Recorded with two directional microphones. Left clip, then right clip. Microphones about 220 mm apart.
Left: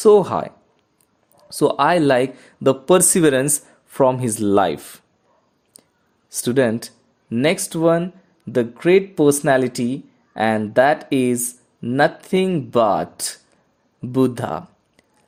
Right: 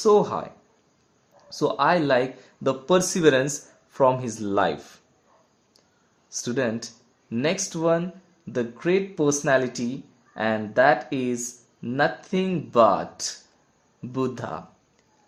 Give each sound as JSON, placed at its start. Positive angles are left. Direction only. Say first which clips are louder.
{"t": 0.0, "sound": "speech", "louder": "left 6 dB", "side_deg": 40}
{"t": 6.3, "sound": "speech", "louder": "left 8 dB", "side_deg": 40}